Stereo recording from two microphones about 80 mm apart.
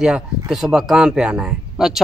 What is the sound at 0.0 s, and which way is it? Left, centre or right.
Speech, centre.